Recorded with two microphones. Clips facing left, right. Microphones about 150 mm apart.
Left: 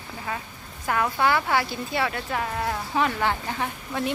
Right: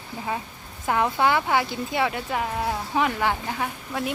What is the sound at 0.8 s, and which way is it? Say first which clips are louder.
Speech: right 2 dB; 20° right (ahead or behind).